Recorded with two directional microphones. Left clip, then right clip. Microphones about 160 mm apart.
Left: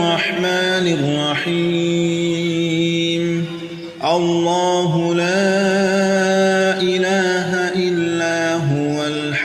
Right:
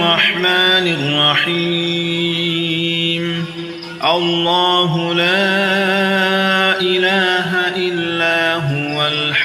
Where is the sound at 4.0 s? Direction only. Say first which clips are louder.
Right 1 dB; 45° left (ahead or behind).